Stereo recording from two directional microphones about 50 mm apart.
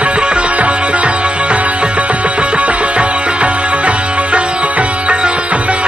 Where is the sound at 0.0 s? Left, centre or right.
Right.